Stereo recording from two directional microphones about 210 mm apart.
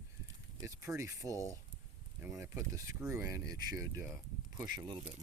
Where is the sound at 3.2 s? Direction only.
45° left (ahead or behind).